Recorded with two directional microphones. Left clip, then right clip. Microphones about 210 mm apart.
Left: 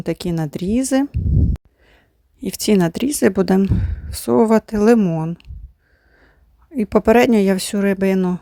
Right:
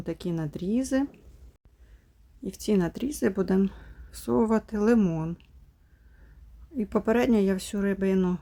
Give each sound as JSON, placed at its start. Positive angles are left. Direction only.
{"t": 0.0, "sound": "a woman's voice", "side_deg": 35}
{"t": 2.4, "sound": "a woman's voice", "side_deg": 40}
{"t": 6.7, "sound": "a woman's voice", "side_deg": 35}